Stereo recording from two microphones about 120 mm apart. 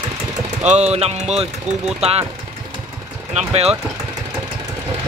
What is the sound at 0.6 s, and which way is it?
Speech, 70° right (ahead or behind).